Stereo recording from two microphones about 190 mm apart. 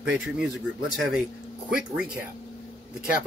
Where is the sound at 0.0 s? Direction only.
5° right (ahead or behind).